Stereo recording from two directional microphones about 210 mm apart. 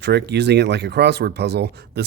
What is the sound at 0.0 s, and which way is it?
Speech, 55° right (ahead or behind).